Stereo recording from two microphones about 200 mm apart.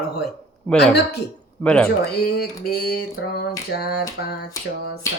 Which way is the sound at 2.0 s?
50° left (ahead or behind).